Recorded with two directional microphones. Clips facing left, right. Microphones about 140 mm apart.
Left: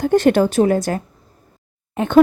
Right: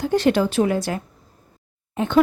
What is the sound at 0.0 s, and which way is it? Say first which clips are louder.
A woman's voice: left 4 dB; 50° left (ahead or behind).